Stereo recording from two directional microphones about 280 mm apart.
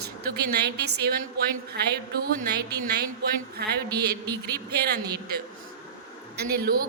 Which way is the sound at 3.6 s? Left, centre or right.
Right.